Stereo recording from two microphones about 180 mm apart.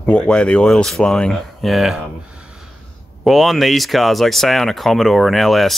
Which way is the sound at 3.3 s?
Centre (ahead or behind).